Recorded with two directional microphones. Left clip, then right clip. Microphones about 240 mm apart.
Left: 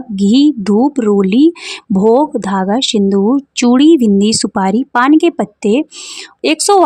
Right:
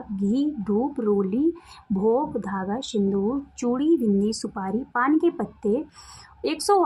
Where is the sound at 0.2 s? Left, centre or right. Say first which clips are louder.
Left 15 dB; left.